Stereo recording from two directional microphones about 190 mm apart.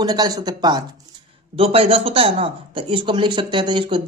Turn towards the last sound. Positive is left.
turn(degrees=-25)  # may be behind; listen again after turning